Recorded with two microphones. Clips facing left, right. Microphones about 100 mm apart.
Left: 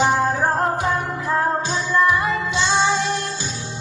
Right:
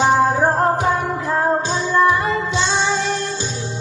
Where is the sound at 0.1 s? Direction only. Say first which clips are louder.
Right 4 dB; 25° right (ahead or behind).